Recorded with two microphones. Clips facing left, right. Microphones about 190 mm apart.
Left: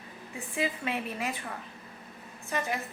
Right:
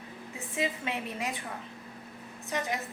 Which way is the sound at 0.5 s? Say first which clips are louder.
Left 1 dB; 20° right (ahead or behind).